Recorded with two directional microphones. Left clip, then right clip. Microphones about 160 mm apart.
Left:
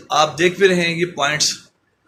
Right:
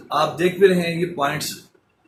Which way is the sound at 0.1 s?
25° left (ahead or behind).